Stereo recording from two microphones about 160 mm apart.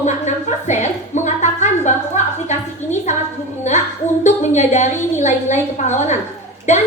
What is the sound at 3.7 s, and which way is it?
A woman's voice, 50° left (ahead or behind).